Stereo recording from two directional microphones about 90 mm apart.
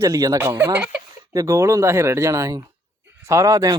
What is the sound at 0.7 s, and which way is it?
Speech, 10° right (ahead or behind).